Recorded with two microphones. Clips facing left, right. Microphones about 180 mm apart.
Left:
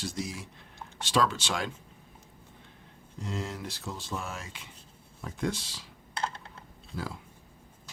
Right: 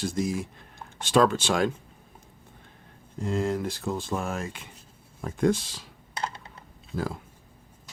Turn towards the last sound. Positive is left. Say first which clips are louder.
# right 6 dB
turn(degrees=-50)  # may be behind; listen again after turning